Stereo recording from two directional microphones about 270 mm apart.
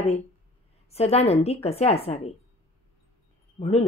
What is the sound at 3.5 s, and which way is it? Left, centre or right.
Speech, left.